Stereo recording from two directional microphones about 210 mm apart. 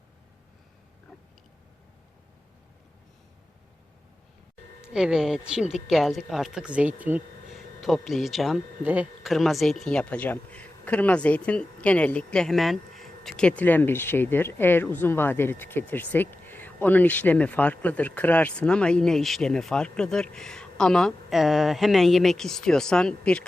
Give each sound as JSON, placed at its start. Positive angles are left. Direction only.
{"t": 4.8, "sound": "speech", "side_deg": -5}